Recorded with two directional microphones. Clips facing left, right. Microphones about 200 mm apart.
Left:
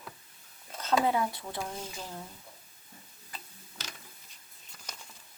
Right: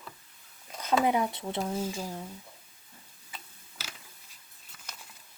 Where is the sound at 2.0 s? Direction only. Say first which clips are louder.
Right 4 dB; 10° right (ahead or behind).